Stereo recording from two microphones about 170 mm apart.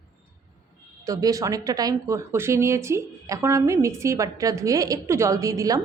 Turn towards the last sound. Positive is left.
turn(degrees=-20)  # may be behind; listen again after turning